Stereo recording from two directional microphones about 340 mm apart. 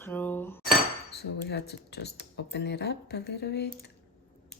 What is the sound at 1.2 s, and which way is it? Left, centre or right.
Speech, left.